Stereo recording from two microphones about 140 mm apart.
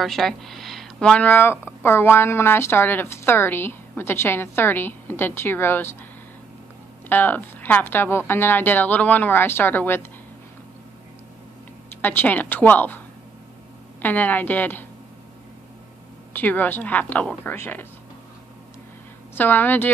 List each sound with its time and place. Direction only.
0.0 s speech: centre (ahead or behind)
7.1 s speech: 15° left (ahead or behind)
12.0 s speech: 15° left (ahead or behind)
14.0 s speech: 15° left (ahead or behind)
16.3 s speech: 10° left (ahead or behind)
19.3 s speech: 15° left (ahead or behind)